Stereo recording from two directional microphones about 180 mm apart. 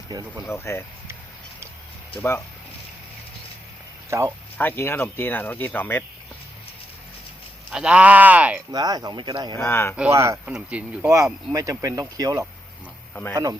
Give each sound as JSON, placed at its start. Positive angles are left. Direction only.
{"t": 0.1, "sound": "speech", "side_deg": -20}
{"t": 0.4, "sound": "speech", "side_deg": 15}
{"t": 2.1, "sound": "speech", "side_deg": 15}
{"t": 4.5, "sound": "speech", "side_deg": 10}
{"t": 7.7, "sound": "speech", "side_deg": -5}
{"t": 8.7, "sound": "speech", "side_deg": -20}
{"t": 9.6, "sound": "speech", "side_deg": 10}
{"t": 10.1, "sound": "speech", "side_deg": -15}
{"t": 10.4, "sound": "speech", "side_deg": -5}